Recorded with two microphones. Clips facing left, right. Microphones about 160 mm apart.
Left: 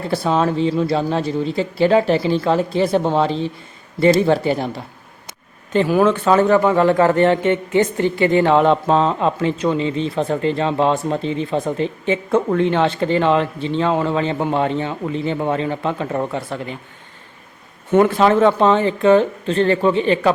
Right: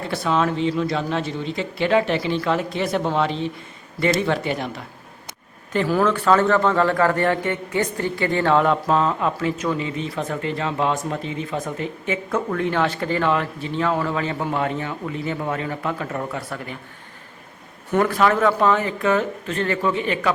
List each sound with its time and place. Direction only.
0.1 s speech: 35° left (ahead or behind)
5.7 s a man's voice: 20° left (ahead or behind)
17.9 s a man's voice: 25° left (ahead or behind)